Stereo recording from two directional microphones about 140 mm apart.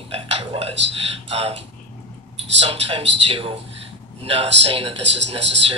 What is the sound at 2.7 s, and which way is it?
Speech, 40° right (ahead or behind).